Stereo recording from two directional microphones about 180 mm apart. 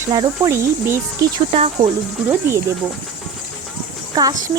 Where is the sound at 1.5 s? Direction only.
35° right (ahead or behind).